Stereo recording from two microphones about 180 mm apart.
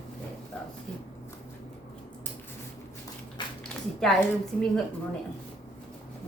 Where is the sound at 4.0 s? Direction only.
Centre (ahead or behind).